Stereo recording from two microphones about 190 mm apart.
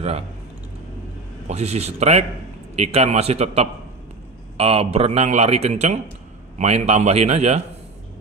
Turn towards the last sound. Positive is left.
turn(degrees=-35)  # may be behind; listen again after turning